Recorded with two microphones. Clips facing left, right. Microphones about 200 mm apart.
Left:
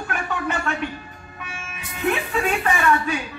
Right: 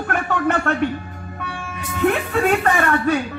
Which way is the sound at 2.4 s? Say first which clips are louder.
Right 4 dB; 60° right (ahead or behind).